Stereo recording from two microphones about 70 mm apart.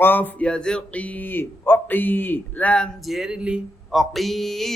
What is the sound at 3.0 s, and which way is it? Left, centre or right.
Speech, centre.